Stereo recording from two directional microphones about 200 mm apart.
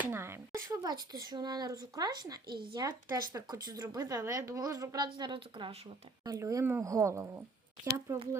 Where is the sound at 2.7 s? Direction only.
20° right (ahead or behind).